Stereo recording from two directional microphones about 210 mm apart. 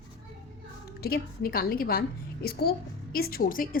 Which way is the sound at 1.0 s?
45° left (ahead or behind).